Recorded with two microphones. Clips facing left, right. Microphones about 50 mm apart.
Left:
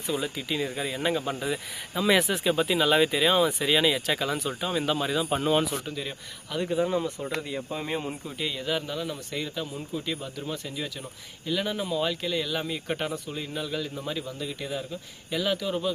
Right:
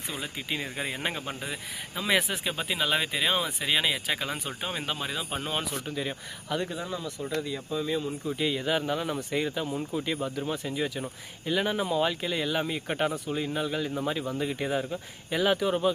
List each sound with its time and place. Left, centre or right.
0.1 s speech: centre
1.2 s speech: centre
4.3 s speech: right
4.9 s speech: centre
6.6 s speech: centre
6.8 s speech: left
8.4 s speech: centre
8.6 s speech: right
14.3 s speech: right